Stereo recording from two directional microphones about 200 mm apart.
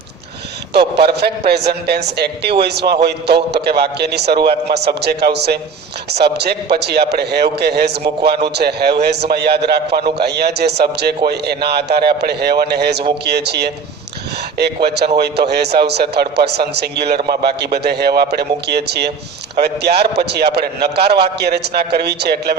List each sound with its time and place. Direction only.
0.9 s a man's voice: 55° right (ahead or behind)
14.8 s a man's voice: 55° right (ahead or behind)